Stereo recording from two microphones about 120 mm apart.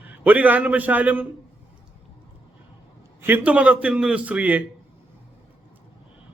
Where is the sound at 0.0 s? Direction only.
15° right (ahead or behind).